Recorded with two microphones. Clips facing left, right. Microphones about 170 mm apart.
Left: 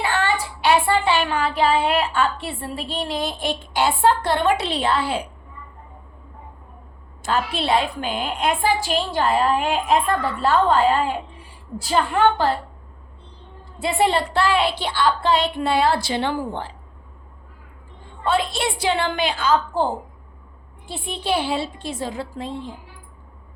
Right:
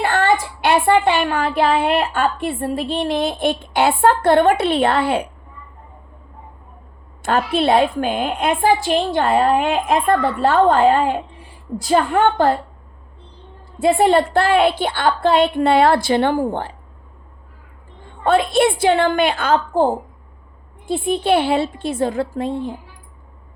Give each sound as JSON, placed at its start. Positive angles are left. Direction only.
{"t": 0.0, "sound": "a sound", "side_deg": -45}
{"t": 0.6, "sound": "a woman's voice", "side_deg": -55}
{"t": 7.2, "sound": "a woman's voice", "side_deg": -55}
{"t": 13.8, "sound": "a woman's voice", "side_deg": -50}
{"t": 18.3, "sound": "a woman's voice", "side_deg": -55}
{"t": 20.9, "sound": "a woman's voice", "side_deg": -55}